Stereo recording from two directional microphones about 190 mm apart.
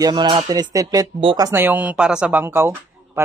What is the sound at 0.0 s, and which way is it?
Speech, 25° right (ahead or behind).